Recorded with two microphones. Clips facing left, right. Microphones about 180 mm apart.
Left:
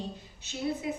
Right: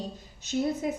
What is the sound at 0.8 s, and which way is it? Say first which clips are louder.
Speech: right 3 dB; 40° right (ahead or behind).